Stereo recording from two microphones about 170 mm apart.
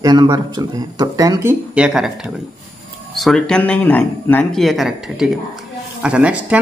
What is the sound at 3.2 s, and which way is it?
Speech, centre (ahead or behind).